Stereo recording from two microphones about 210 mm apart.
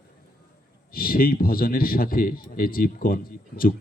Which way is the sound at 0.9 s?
45° left (ahead or behind).